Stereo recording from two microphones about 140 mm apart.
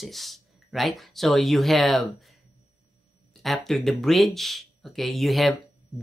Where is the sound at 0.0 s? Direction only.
Centre (ahead or behind).